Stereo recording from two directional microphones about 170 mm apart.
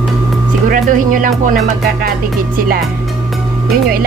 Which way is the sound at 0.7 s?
50° right (ahead or behind).